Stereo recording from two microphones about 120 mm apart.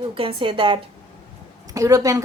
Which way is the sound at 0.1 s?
50° right (ahead or behind).